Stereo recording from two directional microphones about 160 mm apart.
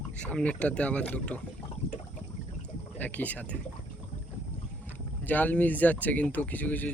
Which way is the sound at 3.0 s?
10° left (ahead or behind).